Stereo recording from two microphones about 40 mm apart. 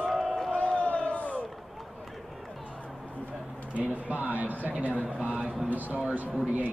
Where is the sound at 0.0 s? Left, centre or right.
Centre.